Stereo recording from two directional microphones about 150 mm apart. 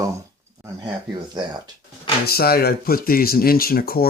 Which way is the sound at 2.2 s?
90° left.